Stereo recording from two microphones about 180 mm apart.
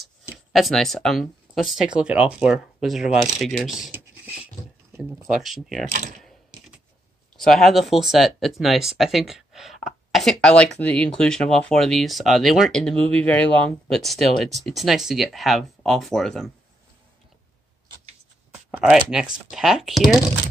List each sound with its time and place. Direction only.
0.5 s speech: centre (ahead or behind)
3.9 s a sound: 5° right (ahead or behind)
5.2 s speech: centre (ahead or behind)
5.9 s speech: 45° right (ahead or behind)
7.3 s speech: centre (ahead or behind)
18.7 s speech: 5° right (ahead or behind)